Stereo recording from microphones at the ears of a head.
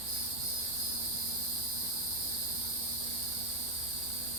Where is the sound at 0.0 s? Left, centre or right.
Right.